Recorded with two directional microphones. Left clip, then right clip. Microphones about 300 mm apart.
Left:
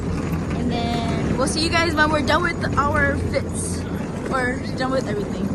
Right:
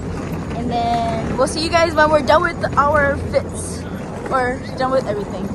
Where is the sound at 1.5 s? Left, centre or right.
Centre.